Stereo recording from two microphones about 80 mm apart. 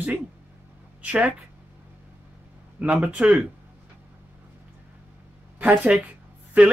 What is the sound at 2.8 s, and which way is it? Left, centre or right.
Speech, centre.